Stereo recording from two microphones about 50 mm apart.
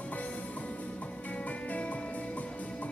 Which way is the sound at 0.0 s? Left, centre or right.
Left.